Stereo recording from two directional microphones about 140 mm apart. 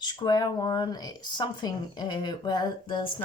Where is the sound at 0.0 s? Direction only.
30° left (ahead or behind).